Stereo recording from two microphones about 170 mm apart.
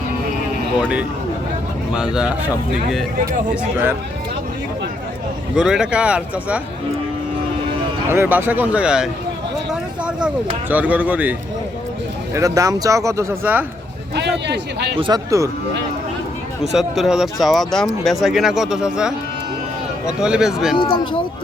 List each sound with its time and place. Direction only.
0.8 s speech: 5° right (ahead or behind)
3.5 s speech: 10° right (ahead or behind)
5.5 s speech: 5° right (ahead or behind)
8.1 s speech: 10° right (ahead or behind)
14.2 s a man's voice: 90° right
14.9 s speech: 30° right (ahead or behind)
16.7 s speech: centre (ahead or behind)
20.7 s speech: 30° left (ahead or behind)